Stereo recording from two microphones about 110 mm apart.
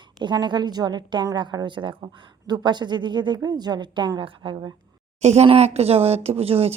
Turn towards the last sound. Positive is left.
turn(degrees=-65)  # may be behind; listen again after turning